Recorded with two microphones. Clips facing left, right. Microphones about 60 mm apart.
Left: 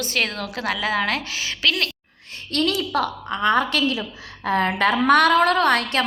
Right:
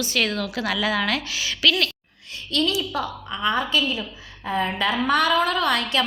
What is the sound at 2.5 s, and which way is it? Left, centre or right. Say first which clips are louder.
A woman's voice: left 2 dB; left.